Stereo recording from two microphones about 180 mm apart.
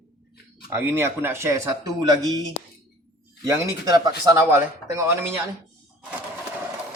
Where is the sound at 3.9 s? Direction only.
20° right (ahead or behind).